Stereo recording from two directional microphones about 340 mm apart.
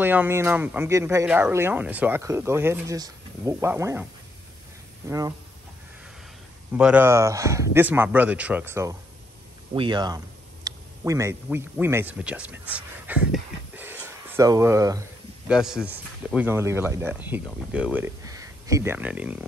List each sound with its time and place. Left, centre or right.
0.0 s speech: centre
6.7 s speech: centre